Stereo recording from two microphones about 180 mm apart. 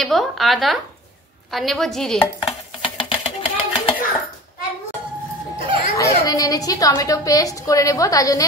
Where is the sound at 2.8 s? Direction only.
30° left (ahead or behind).